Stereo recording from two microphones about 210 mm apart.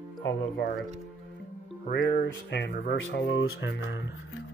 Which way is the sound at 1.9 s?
45° left (ahead or behind).